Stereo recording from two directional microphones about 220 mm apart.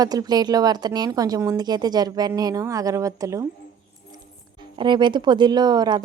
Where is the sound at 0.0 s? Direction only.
15° right (ahead or behind).